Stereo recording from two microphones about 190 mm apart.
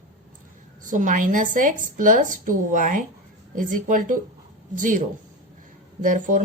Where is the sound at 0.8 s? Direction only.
40° right (ahead or behind).